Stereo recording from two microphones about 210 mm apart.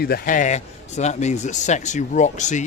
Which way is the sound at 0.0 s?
45° left (ahead or behind).